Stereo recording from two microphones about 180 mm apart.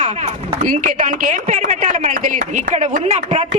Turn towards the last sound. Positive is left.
turn(degrees=-40)  # may be behind; listen again after turning